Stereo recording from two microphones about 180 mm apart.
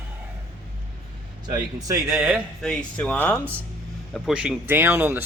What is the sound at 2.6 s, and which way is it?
Speech, 5° left (ahead or behind).